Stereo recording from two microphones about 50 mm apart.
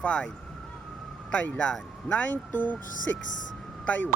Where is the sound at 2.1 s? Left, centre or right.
Left.